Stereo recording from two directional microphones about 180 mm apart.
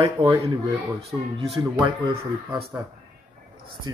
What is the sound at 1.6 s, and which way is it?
A man's voice, 25° right (ahead or behind).